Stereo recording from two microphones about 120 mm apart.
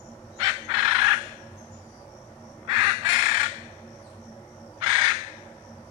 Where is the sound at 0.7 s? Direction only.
45° right (ahead or behind).